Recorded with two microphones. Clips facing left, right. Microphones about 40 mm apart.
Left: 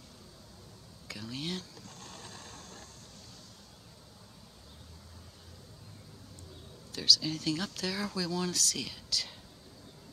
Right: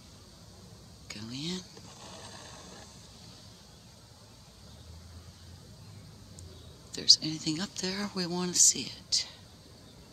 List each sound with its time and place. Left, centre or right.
1.0 s a sound: centre
2.0 s vehicle: centre
6.9 s speech: centre